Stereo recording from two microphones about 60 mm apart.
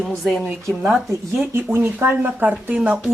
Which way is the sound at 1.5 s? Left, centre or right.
Right.